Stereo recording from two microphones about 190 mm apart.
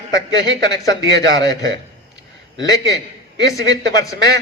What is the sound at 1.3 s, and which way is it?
A man's voice, 20° left (ahead or behind).